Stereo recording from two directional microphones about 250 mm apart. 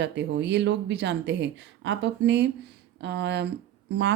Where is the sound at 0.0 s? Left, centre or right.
Right.